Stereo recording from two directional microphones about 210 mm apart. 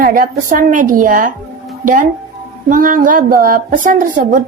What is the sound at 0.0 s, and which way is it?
A woman's voice, 40° right (ahead or behind).